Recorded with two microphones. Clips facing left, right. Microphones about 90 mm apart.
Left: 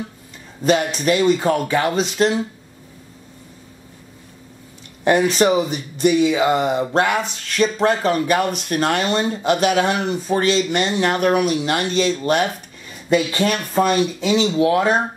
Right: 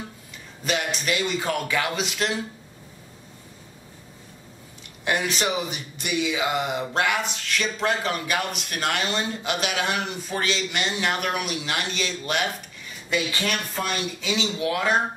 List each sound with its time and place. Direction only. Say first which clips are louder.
0.7 s speech: left 9 dB; 40° left (ahead or behind)
5.0 s speech: left 10 dB; 40° left (ahead or behind)